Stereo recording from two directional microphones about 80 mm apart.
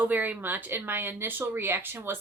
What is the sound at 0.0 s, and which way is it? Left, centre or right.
A woman's voice, right.